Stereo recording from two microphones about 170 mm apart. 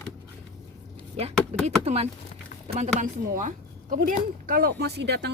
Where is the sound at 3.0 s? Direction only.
50° right (ahead or behind).